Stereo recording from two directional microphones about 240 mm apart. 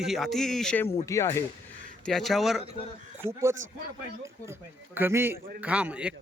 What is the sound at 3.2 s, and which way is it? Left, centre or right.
Speech, centre.